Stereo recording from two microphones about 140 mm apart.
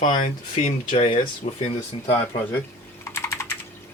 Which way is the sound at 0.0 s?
55° left (ahead or behind).